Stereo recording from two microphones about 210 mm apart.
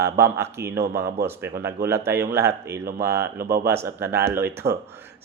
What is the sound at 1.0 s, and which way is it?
Speech, 45° right (ahead or behind).